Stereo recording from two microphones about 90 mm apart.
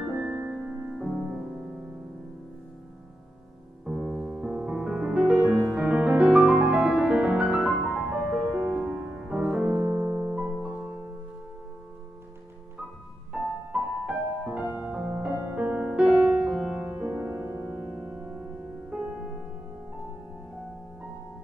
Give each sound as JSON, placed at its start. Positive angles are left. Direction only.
{"t": 0.0, "sound": "music", "side_deg": -15}
{"t": 3.8, "sound": "music", "side_deg": -5}
{"t": 9.8, "sound": "piano", "side_deg": -30}
{"t": 10.3, "sound": "music", "side_deg": -10}
{"t": 13.3, "sound": "music", "side_deg": -15}